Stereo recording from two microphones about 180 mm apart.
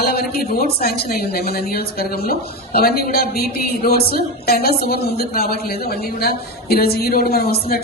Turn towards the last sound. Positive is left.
turn(degrees=60)  # may be behind; listen again after turning